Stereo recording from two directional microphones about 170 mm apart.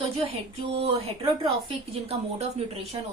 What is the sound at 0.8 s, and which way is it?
A woman's voice, 35° right (ahead or behind).